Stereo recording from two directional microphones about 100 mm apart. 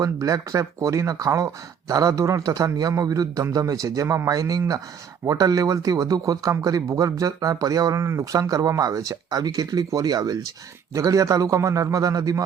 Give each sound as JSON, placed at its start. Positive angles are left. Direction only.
{"t": 0.0, "sound": "speech", "side_deg": -35}